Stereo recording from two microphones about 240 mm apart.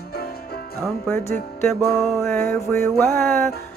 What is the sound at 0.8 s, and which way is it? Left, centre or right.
Music, centre.